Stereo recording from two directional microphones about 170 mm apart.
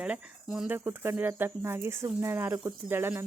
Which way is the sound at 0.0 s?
5° right (ahead or behind).